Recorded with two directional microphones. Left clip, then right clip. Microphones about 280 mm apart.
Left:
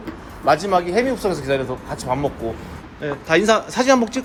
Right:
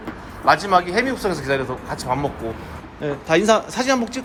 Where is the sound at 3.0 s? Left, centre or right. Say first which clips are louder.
Left 1 dB; centre.